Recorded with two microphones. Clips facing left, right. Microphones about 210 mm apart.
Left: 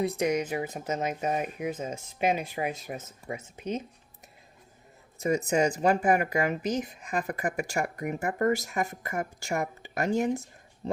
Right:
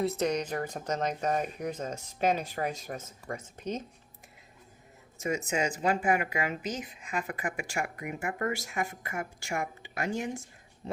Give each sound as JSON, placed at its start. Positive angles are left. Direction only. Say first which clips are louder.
{"t": 0.0, "sound": "speech", "louder": "left 2 dB", "side_deg": 15}
{"t": 5.2, "sound": "speech", "louder": "left 5 dB", "side_deg": 35}